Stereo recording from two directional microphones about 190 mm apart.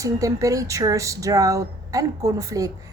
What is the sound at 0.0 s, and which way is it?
A woman's voice, 15° right (ahead or behind).